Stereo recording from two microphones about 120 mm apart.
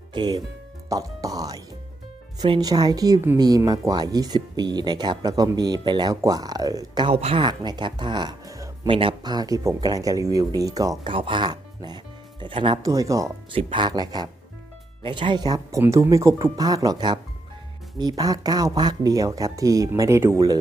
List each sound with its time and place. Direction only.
0.1 s speech: 35° right (ahead or behind)
0.9 s music: 30° right (ahead or behind)
2.4 s speech: 35° right (ahead or behind)
7.1 s speech: 55° right (ahead or behind)
7.4 s speech: 40° right (ahead or behind)
8.9 s speech: 45° right (ahead or behind)
11.0 s speech: 45° right (ahead or behind)
12.8 s speech: 25° right (ahead or behind)
13.5 s speech: 45° right (ahead or behind); by 20.6 s 25° right (ahead or behind)